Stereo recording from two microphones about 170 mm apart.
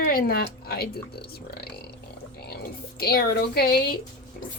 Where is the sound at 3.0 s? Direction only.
65° left (ahead or behind).